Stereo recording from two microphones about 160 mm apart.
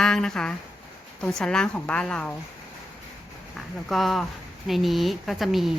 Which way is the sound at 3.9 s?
Centre (ahead or behind).